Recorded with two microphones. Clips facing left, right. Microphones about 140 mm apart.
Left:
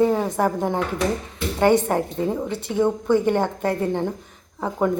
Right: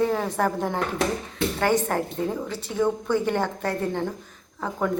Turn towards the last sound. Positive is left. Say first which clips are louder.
# left 4 dB
turn(degrees=20)  # may be behind; listen again after turning